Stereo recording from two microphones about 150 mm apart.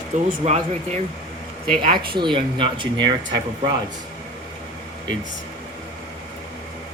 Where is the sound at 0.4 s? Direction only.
50° right (ahead or behind).